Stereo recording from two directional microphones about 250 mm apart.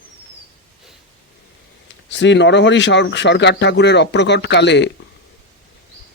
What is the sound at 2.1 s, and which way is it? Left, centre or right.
Speech, left.